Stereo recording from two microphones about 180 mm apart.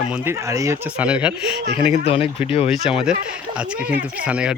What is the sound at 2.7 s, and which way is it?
Speech, centre (ahead or behind).